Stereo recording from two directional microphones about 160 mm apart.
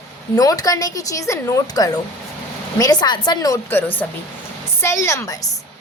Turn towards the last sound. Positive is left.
turn(degrees=20)  # may be behind; listen again after turning